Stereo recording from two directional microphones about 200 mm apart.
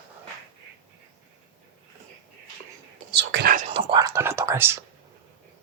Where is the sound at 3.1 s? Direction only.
55° right (ahead or behind).